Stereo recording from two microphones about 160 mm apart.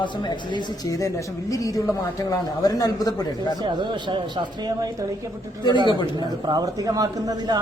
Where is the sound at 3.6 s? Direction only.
30° right (ahead or behind).